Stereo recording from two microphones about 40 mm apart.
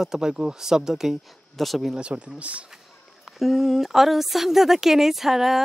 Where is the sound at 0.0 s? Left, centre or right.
Centre.